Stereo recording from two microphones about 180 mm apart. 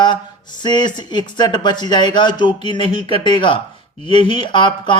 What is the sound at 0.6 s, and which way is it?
Speech, 25° left (ahead or behind).